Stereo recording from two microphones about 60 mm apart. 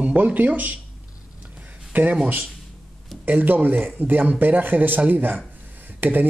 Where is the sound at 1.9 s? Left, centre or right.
Right.